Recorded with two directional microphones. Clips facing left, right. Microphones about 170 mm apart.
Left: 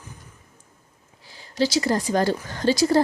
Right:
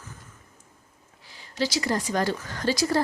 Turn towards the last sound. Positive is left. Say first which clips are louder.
# left 5 dB
turn(degrees=25)  # may be behind; listen again after turning